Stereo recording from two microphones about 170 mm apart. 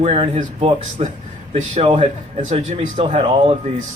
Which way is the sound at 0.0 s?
35° right (ahead or behind).